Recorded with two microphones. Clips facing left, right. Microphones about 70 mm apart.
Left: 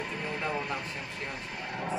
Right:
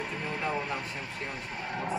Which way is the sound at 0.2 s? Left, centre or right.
Right.